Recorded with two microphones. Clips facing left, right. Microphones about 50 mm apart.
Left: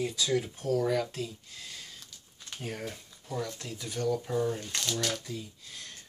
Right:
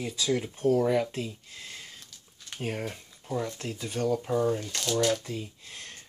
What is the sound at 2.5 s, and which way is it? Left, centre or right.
Speech, right.